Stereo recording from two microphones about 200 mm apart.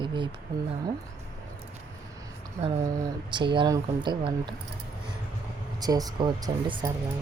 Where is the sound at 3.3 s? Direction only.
25° right (ahead or behind).